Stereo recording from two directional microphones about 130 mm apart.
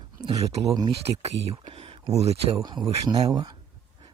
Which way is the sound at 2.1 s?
55° right (ahead or behind).